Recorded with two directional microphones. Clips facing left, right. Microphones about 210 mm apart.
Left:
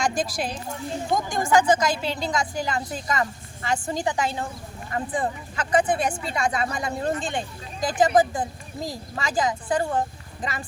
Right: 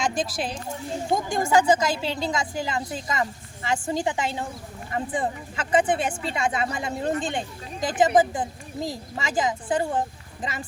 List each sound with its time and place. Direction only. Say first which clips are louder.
0.4 s a woman's voice: even; 25° right (ahead or behind)